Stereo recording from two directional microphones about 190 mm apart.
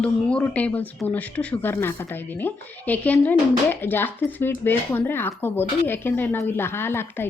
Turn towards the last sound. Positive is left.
turn(degrees=10)  # may be behind; listen again after turning